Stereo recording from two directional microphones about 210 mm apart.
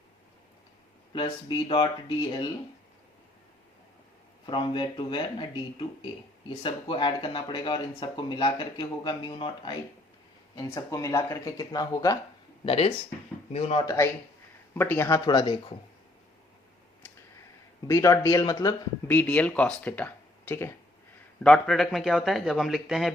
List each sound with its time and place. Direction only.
1.1 s speech: 20° left (ahead or behind)
4.4 s speech: 20° left (ahead or behind)
6.6 s speech: 25° left (ahead or behind)
12.6 s speech: 25° left (ahead or behind)
13.8 s speech: 15° left (ahead or behind)
17.8 s a man's voice: 15° left (ahead or behind)